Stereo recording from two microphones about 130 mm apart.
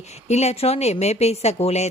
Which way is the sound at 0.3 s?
55° left (ahead or behind).